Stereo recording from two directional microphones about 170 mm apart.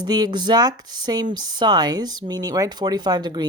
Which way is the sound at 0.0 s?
25° right (ahead or behind).